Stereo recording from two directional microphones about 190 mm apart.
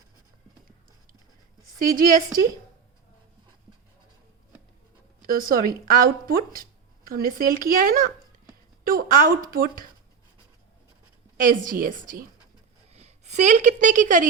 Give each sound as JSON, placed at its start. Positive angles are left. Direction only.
{"t": 1.8, "sound": "speech", "side_deg": -50}
{"t": 5.2, "sound": "speech", "side_deg": -50}
{"t": 11.3, "sound": "speech", "side_deg": -45}
{"t": 12.9, "sound": "a woman's voice", "side_deg": -35}